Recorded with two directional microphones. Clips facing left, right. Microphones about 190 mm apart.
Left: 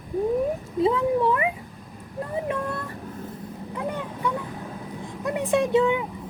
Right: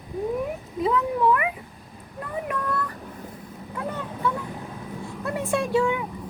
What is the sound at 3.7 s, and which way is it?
Vehicle, 15° left (ahead or behind).